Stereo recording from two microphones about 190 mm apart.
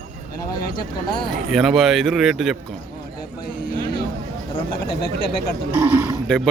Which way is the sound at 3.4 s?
50° left (ahead or behind).